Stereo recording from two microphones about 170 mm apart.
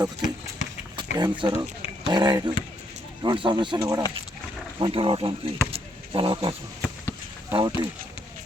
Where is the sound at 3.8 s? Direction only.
15° right (ahead or behind).